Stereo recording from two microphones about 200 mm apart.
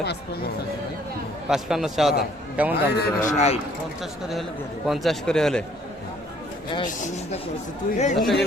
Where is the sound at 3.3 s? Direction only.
35° left (ahead or behind).